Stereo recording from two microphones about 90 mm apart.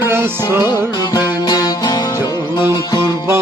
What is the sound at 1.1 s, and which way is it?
Music, 45° left (ahead or behind).